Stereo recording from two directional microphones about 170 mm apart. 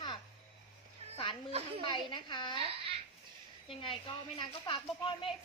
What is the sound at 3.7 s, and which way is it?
A woman's voice, 30° left (ahead or behind).